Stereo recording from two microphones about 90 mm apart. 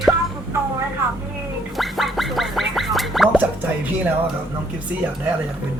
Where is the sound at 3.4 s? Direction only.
20° right (ahead or behind).